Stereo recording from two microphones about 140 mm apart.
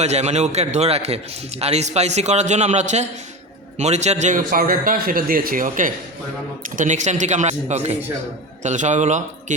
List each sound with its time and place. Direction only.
0.0 s a man's voice: 50° right (ahead or behind)